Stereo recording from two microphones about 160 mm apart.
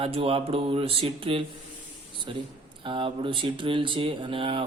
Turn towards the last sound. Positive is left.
turn(degrees=-35)  # may be behind; listen again after turning